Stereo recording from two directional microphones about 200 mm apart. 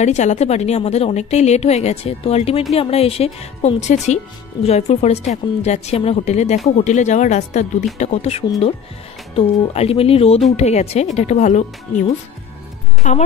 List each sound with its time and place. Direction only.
0.0 s a woman's voice: 35° left (ahead or behind)
13.0 s a woman's voice: 40° left (ahead or behind)